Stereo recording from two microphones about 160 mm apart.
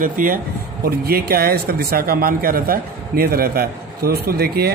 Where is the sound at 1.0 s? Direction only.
70° right (ahead or behind).